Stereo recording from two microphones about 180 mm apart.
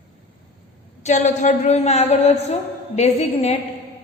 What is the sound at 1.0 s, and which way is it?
A woman's voice, 40° left (ahead or behind).